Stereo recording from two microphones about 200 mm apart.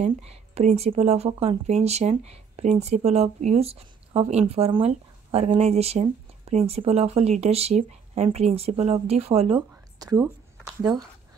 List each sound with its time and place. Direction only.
0.0 s speech: 30° right (ahead or behind)
9.9 s speech: 20° right (ahead or behind)